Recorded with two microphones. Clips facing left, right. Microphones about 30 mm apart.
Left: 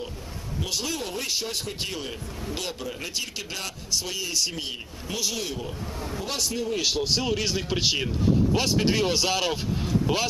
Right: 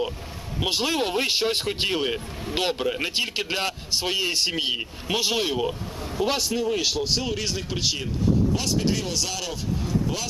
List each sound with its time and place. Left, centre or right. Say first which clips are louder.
0.6 s a man's voice: right 6 dB; right
6.1 s a man's voice: right 6 dB; centre
6.9 s a man's voice: even; centre; by 9.6 s left